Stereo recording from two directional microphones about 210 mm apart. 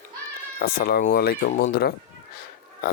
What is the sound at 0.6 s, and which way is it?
Speech, 45° left (ahead or behind).